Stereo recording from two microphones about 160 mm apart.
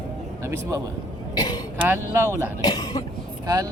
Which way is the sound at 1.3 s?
25° left (ahead or behind).